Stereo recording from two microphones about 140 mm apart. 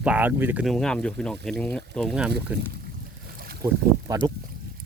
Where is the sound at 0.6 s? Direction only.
5° left (ahead or behind).